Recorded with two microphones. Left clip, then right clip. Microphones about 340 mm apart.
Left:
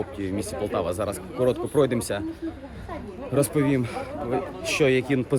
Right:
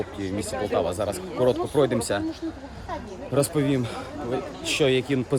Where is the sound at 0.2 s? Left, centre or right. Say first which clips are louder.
Right 1 dB; centre.